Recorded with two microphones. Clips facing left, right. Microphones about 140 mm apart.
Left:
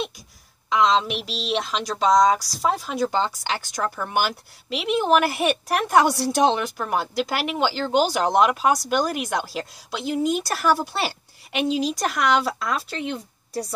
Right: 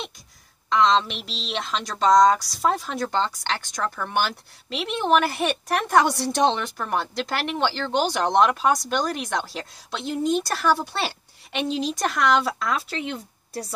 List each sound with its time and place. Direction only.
0.7 s speech: 5° left (ahead or behind)